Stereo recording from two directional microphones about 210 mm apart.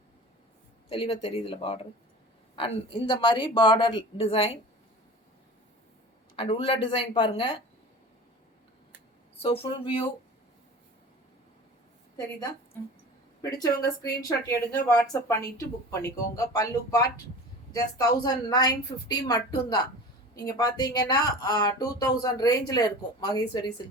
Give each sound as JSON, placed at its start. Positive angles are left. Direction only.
{"t": 0.9, "sound": "speech", "side_deg": 25}
{"t": 6.3, "sound": "speech", "side_deg": 25}
{"t": 9.4, "sound": "speech", "side_deg": 25}
{"t": 13.4, "sound": "speech", "side_deg": 15}